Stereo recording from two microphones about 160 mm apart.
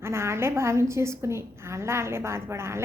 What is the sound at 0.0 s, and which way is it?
A woman's voice, 15° right (ahead or behind).